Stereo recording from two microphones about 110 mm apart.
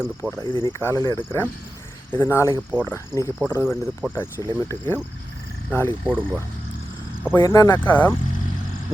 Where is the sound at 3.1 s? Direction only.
5° right (ahead or behind).